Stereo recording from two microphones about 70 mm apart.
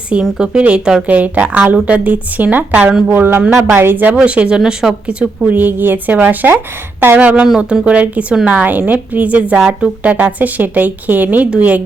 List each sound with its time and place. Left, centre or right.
0.1 s a woman's voice: centre; by 4.1 s right
4.1 s a woman's voice: centre
5.5 s speech: right
7.6 s speech: centre